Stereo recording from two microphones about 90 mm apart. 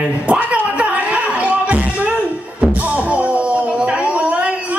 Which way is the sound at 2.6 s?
15° right (ahead or behind).